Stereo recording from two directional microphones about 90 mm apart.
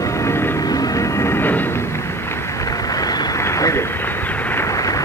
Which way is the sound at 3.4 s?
35° left (ahead or behind).